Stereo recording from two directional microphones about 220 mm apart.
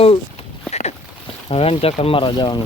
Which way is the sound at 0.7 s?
30° left (ahead or behind).